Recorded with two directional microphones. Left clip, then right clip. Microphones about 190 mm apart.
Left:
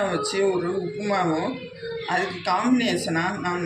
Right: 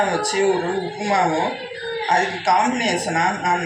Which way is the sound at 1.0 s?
25° left (ahead or behind).